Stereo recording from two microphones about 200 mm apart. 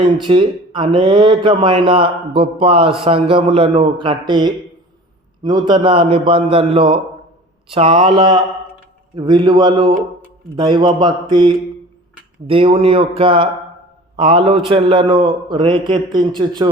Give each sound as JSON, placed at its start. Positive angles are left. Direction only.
{"t": 0.0, "sound": "speech", "side_deg": -25}